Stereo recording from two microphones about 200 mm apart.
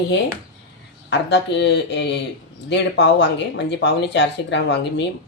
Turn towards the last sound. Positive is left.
turn(degrees=60)  # may be behind; listen again after turning